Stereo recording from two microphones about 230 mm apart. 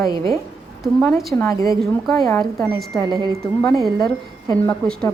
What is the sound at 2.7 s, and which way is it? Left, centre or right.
Speech, centre.